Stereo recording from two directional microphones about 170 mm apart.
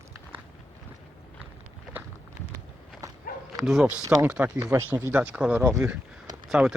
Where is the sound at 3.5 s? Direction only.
Centre (ahead or behind).